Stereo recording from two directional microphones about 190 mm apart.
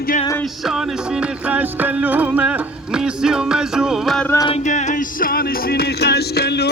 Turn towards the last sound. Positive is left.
turn(degrees=60)  # may be behind; listen again after turning